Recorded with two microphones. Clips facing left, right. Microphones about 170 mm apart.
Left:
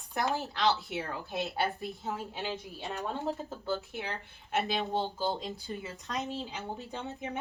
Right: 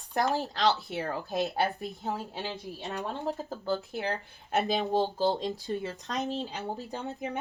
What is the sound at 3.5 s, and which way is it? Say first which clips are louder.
Speech: right 3 dB; 35° right (ahead or behind).